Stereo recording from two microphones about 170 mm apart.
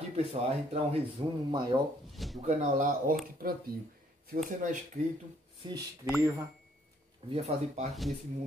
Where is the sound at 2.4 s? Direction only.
45° right (ahead or behind).